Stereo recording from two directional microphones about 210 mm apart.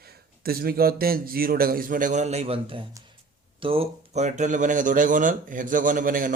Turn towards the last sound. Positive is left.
turn(degrees=-40)  # may be behind; listen again after turning